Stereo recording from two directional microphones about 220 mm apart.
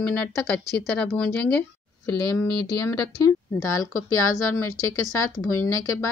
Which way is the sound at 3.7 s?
75° left (ahead or behind).